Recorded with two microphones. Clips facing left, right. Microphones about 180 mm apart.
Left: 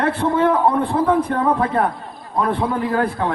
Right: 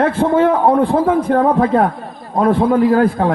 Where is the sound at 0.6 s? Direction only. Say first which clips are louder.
Right 4 dB; 40° right (ahead or behind).